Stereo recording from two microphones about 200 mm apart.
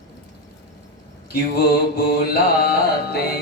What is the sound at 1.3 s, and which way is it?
Mantra, 50° left (ahead or behind).